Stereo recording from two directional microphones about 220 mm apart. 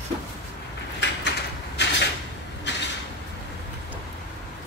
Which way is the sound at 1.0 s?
50° left (ahead or behind).